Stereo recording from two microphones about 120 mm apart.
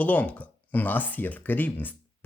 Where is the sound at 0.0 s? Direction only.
10° left (ahead or behind).